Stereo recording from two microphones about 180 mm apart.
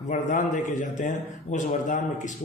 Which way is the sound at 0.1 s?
45° left (ahead or behind).